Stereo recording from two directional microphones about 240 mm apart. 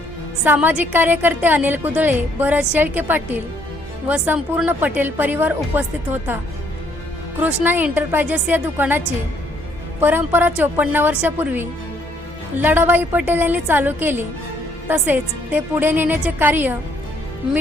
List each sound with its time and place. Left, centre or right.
0.4 s a woman's voice: centre
7.4 s a woman's voice: centre
10.0 s a woman's voice: centre